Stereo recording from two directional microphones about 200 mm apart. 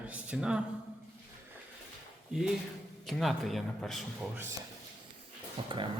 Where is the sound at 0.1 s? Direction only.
5° right (ahead or behind).